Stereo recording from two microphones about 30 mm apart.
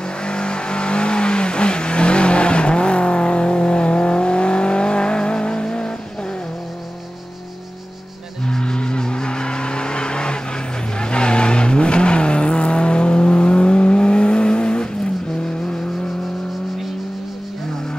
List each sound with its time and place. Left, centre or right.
0.2 s vehicle: left
8.5 s vehicle: left